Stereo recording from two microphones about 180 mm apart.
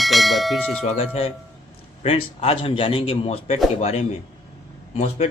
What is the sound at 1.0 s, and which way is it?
A man's voice, 30° left (ahead or behind).